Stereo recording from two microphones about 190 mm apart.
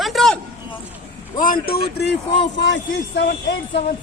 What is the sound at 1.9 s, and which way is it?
Speech, 60° left (ahead or behind).